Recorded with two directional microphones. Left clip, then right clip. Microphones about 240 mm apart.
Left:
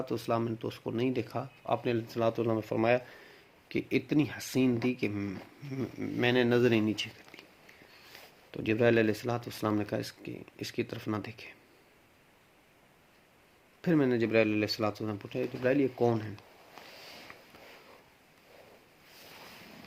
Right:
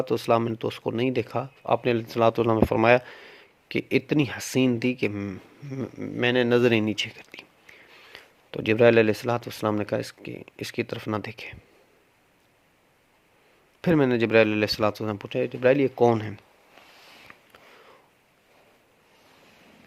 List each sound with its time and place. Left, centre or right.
0.0 s speech: right
13.8 s speech: right